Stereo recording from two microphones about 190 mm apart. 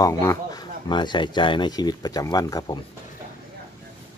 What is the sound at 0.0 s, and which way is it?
Speech, 15° left (ahead or behind).